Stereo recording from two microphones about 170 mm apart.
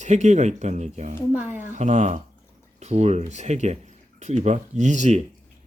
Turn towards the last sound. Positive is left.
turn(degrees=-45)  # may be behind; listen again after turning